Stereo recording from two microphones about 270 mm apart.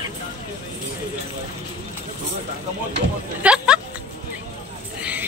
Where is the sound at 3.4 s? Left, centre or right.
Centre.